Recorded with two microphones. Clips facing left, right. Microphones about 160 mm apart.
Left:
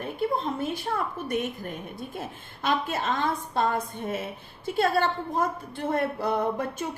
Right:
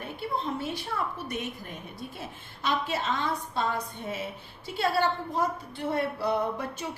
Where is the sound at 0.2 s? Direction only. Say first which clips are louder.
Left 4 dB; 50° left (ahead or behind).